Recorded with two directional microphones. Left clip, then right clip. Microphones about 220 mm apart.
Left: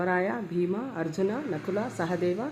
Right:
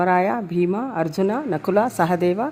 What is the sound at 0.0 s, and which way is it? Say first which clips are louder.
A woman's voice: right 9 dB; 45° right (ahead or behind).